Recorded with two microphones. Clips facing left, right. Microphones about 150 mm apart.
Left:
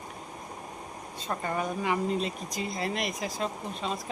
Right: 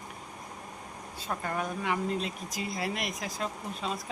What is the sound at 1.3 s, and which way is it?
Speech, centre (ahead or behind).